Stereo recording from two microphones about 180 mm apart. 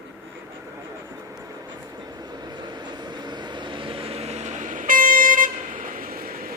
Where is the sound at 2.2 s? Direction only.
20° right (ahead or behind).